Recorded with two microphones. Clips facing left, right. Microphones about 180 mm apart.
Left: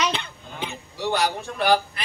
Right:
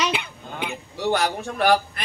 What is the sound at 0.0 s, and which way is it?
Honk, 10° right (ahead or behind).